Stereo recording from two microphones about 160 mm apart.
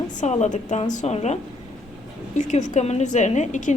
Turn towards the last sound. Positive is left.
turn(degrees=50)  # may be behind; listen again after turning